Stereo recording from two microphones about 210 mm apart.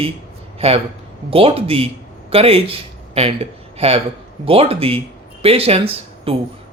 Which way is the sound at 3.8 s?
30° right (ahead or behind).